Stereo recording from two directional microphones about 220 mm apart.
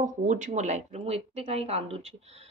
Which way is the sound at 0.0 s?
35° right (ahead or behind).